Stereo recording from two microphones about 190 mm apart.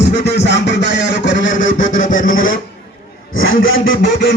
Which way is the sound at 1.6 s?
45° left (ahead or behind).